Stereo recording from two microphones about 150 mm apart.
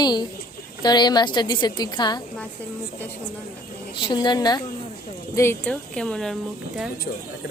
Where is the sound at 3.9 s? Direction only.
30° left (ahead or behind).